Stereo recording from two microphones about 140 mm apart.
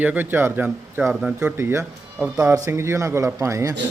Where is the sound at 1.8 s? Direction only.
5° right (ahead or behind).